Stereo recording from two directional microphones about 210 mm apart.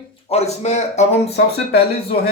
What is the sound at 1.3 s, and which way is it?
Speech, 50° left (ahead or behind).